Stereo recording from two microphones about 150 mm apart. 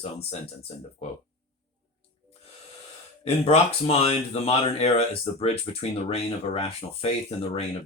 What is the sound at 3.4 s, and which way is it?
Speech, 45° left (ahead or behind).